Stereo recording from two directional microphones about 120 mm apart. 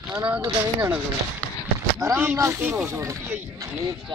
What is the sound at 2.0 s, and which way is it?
Speech, 20° right (ahead or behind).